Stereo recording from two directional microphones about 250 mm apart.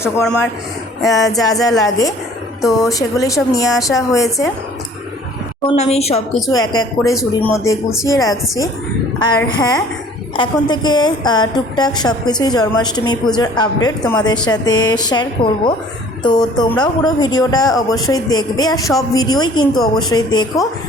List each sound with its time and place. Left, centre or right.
0.0 s speech: centre
1.0 s a woman's voice: centre
5.6 s a woman's voice: left
6.6 s a woman's voice: centre
7.1 s speech: centre
7.5 s a woman's voice: centre